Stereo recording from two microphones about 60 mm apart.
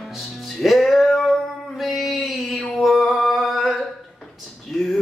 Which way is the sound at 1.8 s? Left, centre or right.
Centre.